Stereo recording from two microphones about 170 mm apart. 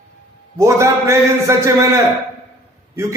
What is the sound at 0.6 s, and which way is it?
A man's voice, 15° right (ahead or behind).